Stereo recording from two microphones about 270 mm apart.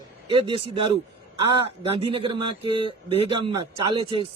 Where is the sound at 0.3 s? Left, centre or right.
Centre.